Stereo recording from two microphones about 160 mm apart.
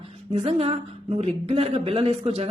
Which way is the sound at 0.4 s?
40° right (ahead or behind).